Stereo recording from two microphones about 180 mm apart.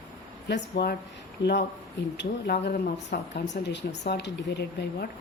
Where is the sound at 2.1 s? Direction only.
60° left (ahead or behind).